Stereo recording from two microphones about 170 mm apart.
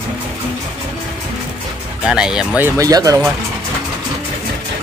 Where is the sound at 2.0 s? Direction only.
5° right (ahead or behind).